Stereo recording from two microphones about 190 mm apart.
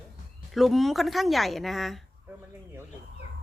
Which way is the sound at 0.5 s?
Centre (ahead or behind).